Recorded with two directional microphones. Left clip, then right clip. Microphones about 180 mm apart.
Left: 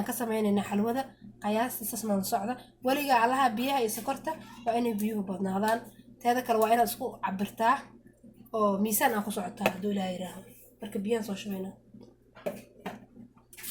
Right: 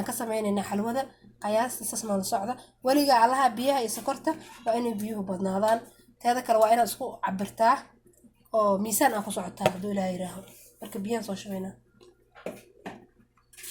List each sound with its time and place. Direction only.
0.0 s speech: 30° right (ahead or behind)